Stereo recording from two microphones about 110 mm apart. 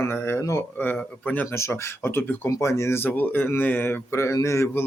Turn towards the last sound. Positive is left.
turn(degrees=25)  # may be behind; listen again after turning